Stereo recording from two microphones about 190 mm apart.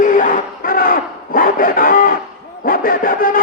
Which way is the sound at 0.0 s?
45° left (ahead or behind).